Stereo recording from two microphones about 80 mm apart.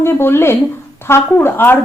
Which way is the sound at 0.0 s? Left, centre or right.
Left.